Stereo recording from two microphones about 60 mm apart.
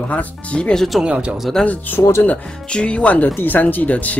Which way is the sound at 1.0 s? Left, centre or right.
Right.